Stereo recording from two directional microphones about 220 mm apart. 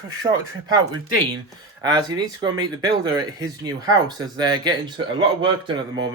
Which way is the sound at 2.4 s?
20° right (ahead or behind).